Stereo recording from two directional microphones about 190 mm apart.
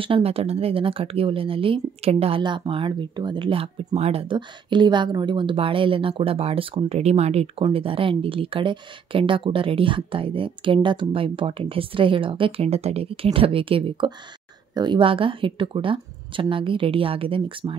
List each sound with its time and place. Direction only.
0.0 s speech: 30° right (ahead or behind)